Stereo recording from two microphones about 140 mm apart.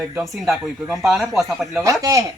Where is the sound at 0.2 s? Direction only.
5° right (ahead or behind).